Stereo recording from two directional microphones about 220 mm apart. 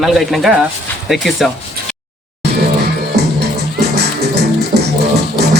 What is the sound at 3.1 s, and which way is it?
Music, 50° right (ahead or behind).